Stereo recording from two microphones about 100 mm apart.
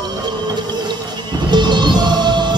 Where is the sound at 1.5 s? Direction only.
50° right (ahead or behind).